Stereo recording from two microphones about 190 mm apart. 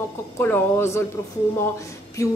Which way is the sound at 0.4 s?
10° left (ahead or behind).